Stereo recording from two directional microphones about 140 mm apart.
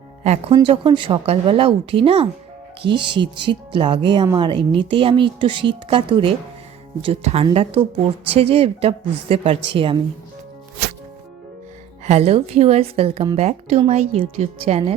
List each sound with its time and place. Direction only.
0.5 s a woman's voice: 35° right (ahead or behind)
12.0 s a woman's voice: 50° right (ahead or behind)